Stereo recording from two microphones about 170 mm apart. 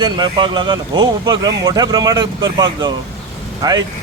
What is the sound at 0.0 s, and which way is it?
Speech, 25° right (ahead or behind).